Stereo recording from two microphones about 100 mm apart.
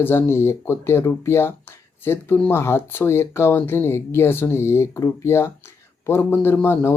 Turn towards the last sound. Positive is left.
turn(degrees=20)  # may be behind; listen again after turning